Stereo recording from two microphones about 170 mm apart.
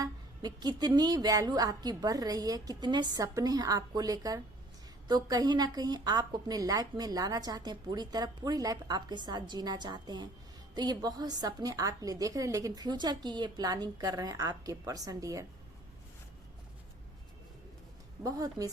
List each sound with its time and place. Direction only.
0.0 s a woman's voice: 25° right (ahead or behind)
18.2 s a woman's voice: 20° right (ahead or behind)